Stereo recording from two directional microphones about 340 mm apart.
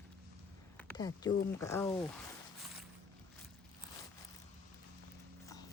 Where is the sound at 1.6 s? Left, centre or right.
Centre.